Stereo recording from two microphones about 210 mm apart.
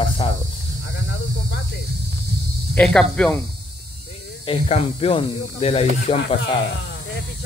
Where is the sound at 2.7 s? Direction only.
5° left (ahead or behind).